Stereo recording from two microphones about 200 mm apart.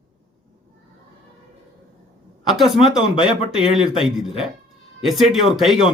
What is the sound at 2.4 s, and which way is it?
Speech, centre (ahead or behind).